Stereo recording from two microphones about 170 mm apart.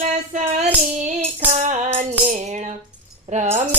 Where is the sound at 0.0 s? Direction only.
45° right (ahead or behind).